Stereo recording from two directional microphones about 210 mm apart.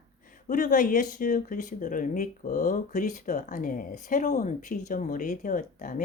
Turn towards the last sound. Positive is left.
turn(degrees=40)  # may be behind; listen again after turning